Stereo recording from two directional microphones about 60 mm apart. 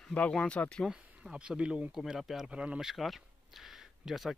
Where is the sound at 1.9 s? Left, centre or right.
Centre.